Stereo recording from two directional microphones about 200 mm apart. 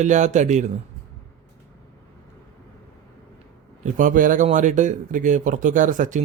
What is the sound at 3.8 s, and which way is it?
Speech, 40° right (ahead or behind).